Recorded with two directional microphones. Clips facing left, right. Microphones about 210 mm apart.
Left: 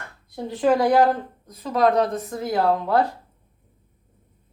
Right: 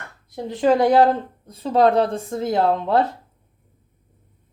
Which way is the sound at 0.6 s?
20° right (ahead or behind).